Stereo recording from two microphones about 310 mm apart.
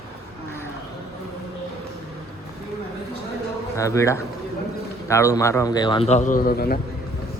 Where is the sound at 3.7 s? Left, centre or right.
Centre; by 6.8 s left.